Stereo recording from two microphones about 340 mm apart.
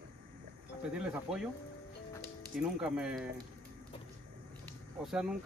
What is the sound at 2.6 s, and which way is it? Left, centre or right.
Speech, centre.